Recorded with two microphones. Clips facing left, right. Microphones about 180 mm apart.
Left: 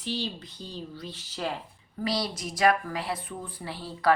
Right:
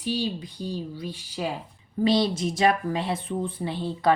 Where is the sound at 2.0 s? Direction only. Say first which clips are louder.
Right 8 dB; 25° right (ahead or behind).